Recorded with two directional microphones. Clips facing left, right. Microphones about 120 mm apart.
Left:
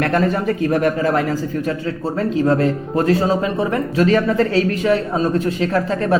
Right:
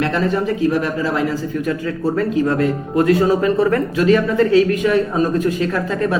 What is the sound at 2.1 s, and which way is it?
Speech, 30° left (ahead or behind).